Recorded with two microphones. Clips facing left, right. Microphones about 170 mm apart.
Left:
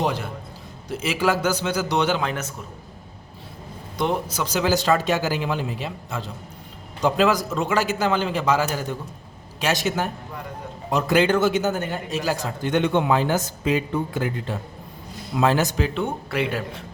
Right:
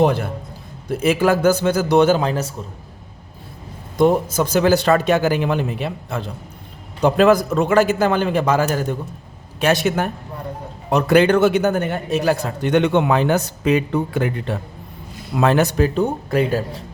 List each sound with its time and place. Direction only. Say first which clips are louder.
0.0 s a man's voice: right 8 dB; 55° right (ahead or behind); by 2.5 s 35° right (ahead or behind)
3.9 s a man's voice: right 9 dB; 45° right (ahead or behind); by 15.9 s 60° right (ahead or behind)
16.0 s speech: right 6 dB; 40° right (ahead or behind)